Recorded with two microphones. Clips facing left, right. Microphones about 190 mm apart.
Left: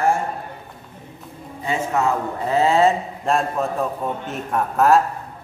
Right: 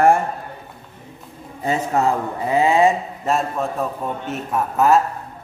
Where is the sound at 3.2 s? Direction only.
Centre (ahead or behind).